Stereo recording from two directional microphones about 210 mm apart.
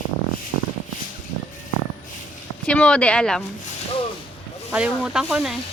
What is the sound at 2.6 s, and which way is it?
Speech, 5° left (ahead or behind).